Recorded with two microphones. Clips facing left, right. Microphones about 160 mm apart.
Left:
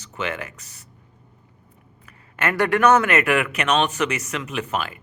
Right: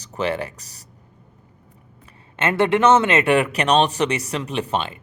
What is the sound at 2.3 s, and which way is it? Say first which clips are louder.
Speech: right 2 dB; 25° right (ahead or behind).